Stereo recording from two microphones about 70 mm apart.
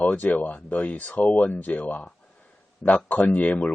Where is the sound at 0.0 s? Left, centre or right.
Left.